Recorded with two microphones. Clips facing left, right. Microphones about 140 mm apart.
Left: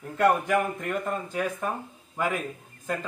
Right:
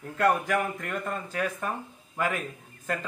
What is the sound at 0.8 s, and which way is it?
Speech, 10° left (ahead or behind).